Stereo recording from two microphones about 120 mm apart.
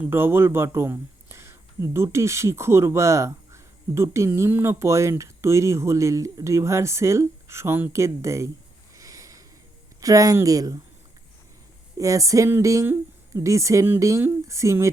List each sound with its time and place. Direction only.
0.0 s speech: 20° right (ahead or behind)
9.0 s a sound: 25° right (ahead or behind)
10.0 s speech: 30° right (ahead or behind)
11.9 s speech: 25° right (ahead or behind)